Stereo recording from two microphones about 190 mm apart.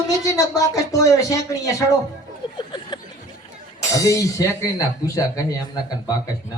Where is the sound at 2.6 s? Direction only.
25° left (ahead or behind).